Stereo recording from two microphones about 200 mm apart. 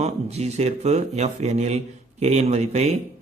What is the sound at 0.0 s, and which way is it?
Speech, 35° right (ahead or behind).